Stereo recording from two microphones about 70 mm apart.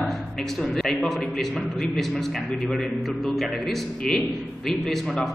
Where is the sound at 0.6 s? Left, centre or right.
Centre.